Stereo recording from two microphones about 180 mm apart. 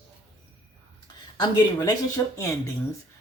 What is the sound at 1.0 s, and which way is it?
Speech, 20° left (ahead or behind).